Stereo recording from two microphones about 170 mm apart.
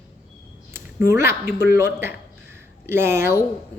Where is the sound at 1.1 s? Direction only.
15° right (ahead or behind).